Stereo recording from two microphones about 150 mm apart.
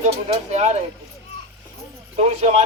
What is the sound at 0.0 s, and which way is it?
Speech, 45° right (ahead or behind).